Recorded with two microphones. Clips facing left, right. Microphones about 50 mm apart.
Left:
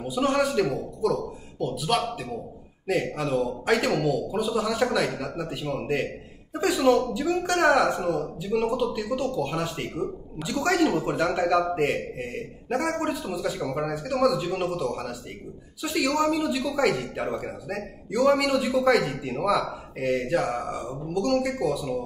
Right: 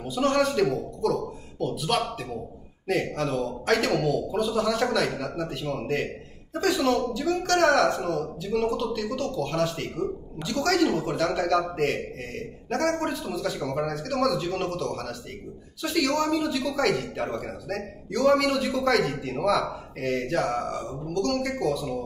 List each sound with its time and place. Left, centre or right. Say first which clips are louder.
0.0 s a man's voice: even; centre